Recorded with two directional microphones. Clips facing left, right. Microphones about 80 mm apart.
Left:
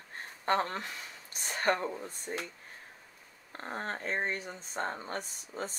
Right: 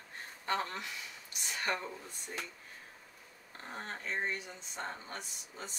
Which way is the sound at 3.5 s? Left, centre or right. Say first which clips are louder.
Left 6 dB; left.